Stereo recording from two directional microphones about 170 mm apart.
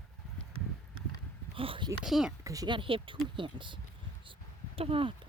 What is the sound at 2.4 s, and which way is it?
Speech, 20° right (ahead or behind).